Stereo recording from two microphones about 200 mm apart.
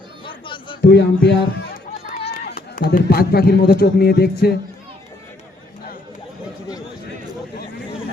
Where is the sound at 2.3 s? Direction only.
45° left (ahead or behind).